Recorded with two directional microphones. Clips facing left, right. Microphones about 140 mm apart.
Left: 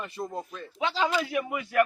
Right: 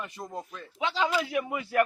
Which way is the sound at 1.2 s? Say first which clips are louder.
Even; 25° right (ahead or behind).